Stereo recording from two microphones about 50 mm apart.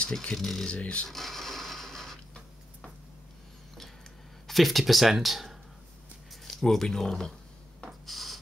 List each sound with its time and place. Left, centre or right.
0.3 s speech: centre
0.7 s speech: left
1.0 s a sound: centre
4.5 s speech: centre
6.4 s speech: centre
8.1 s writing: centre